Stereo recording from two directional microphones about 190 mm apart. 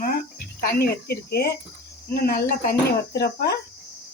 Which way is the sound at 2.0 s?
50° left (ahead or behind).